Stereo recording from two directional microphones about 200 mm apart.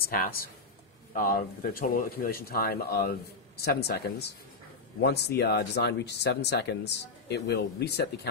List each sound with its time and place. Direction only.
0.0 s speech: 50° left (ahead or behind)